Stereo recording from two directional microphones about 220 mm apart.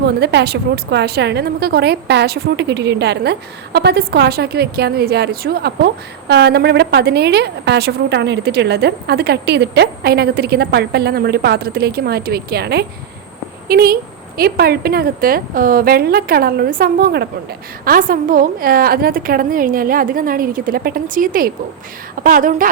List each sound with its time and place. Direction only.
0.0 s a woman's voice: 50° right (ahead or behind)